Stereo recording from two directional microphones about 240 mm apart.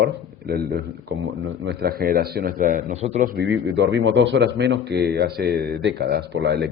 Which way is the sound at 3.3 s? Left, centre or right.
Right.